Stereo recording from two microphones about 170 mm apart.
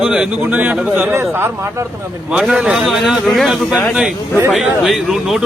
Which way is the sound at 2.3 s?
5° right (ahead or behind).